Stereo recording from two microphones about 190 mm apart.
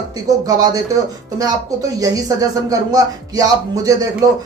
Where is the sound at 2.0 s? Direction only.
20° right (ahead or behind).